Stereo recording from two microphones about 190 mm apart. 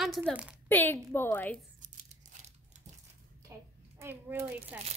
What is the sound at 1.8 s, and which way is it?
Tearing, 40° right (ahead or behind).